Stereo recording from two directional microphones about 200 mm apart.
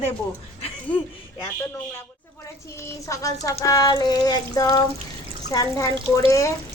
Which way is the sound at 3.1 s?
15° left (ahead or behind).